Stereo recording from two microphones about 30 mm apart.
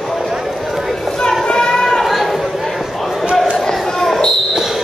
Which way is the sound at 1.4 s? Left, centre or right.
Left.